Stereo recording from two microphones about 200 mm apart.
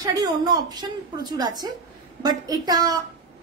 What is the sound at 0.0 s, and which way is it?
A woman's voice, 20° right (ahead or behind).